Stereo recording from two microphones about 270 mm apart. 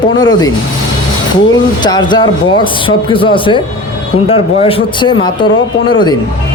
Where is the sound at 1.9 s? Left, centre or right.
Centre.